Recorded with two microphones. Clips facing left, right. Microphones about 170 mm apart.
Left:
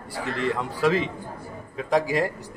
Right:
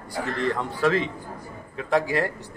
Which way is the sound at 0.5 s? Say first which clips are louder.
Left 1 dB; 10° left (ahead or behind).